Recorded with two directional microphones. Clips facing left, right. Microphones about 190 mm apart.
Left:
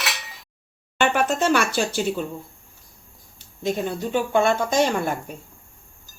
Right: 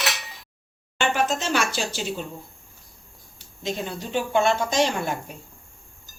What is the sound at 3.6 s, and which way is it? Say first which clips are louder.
Speech: left 5 dB; 55° left (ahead or behind).